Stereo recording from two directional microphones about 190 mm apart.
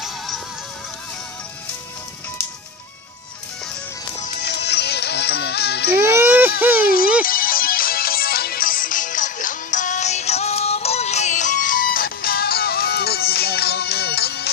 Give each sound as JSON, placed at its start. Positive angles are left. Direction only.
{"t": 4.4, "sound": "music", "side_deg": 60}
{"t": 6.0, "sound": "a sound", "side_deg": -10}
{"t": 7.2, "sound": "music", "side_deg": 50}